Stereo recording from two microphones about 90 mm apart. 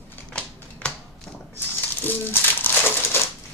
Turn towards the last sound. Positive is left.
turn(degrees=20)  # may be behind; listen again after turning